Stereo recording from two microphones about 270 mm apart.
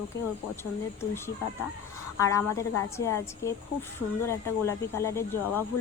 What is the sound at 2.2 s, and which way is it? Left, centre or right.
Speech, centre.